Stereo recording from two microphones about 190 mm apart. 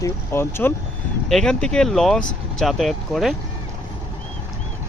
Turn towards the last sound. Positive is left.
turn(degrees=0)  # may be behind; listen again after turning